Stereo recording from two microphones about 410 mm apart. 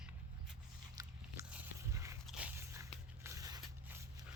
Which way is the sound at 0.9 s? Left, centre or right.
Centre.